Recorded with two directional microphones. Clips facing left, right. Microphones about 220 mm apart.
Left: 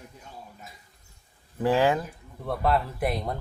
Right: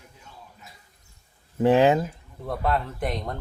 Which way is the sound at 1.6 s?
20° right (ahead or behind).